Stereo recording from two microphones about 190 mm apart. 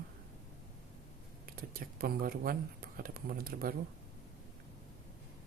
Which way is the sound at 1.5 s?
50° right (ahead or behind).